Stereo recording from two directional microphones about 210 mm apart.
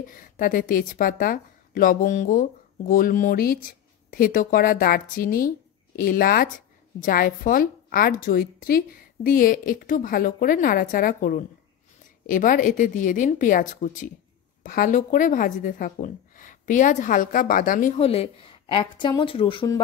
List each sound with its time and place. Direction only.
0.0 s a woman's voice: 40° left (ahead or behind); by 19.8 s 25° left (ahead or behind)